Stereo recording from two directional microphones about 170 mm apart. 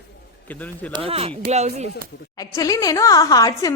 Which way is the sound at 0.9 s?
35° right (ahead or behind).